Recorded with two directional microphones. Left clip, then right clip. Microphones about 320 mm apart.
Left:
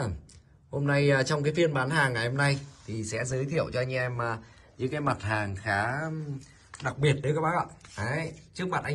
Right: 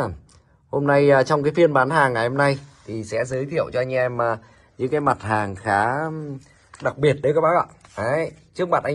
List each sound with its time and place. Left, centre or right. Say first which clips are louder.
0.7 s speech: right 10 dB; centre